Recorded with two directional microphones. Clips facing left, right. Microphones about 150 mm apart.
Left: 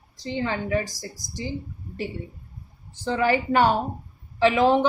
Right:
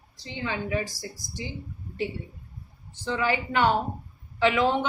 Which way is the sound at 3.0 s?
45° left (ahead or behind).